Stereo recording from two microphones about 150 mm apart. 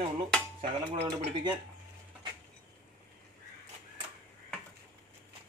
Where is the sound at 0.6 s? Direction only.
35° right (ahead or behind).